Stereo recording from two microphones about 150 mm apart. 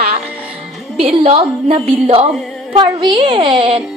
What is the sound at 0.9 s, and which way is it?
A woman's voice, 40° right (ahead or behind).